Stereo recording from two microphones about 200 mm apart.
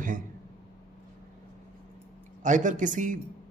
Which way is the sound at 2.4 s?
40° right (ahead or behind).